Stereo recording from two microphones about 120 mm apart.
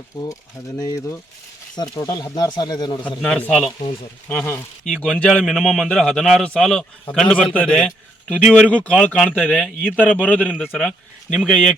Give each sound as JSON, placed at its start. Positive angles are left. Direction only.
{"t": 0.1, "sound": "speech", "side_deg": 35}
{"t": 3.2, "sound": "a man's voice", "side_deg": 5}